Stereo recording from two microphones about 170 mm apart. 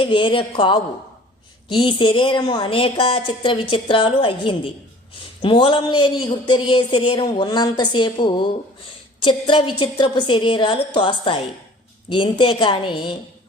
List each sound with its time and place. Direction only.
0.0 s speech: 30° left (ahead or behind)